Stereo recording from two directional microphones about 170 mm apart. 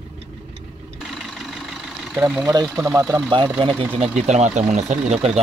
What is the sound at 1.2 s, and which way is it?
Vehicle, centre (ahead or behind).